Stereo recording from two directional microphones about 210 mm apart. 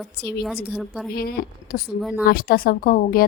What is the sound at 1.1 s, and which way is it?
A woman's voice, 45° left (ahead or behind).